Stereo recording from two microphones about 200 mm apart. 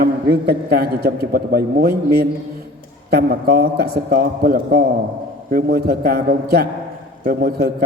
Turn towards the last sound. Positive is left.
turn(degrees=-50)  # may be behind; listen again after turning